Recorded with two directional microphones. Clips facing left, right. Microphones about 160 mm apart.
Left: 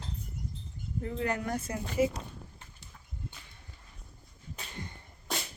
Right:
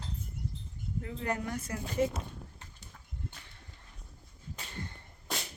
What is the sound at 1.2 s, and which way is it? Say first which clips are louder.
Speech: left 2 dB; 90° left.